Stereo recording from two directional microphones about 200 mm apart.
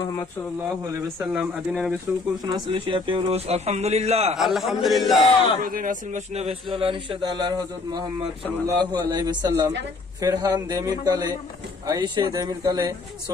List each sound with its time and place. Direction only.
0.6 s speech: 10° right (ahead or behind)
2.4 s a man's voice: 20° right (ahead or behind)
4.4 s speech: centre (ahead or behind)
5.6 s a man's voice: 45° right (ahead or behind); by 12.9 s 20° right (ahead or behind)